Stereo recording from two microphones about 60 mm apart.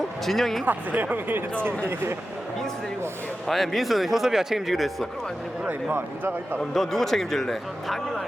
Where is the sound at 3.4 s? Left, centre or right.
Centre.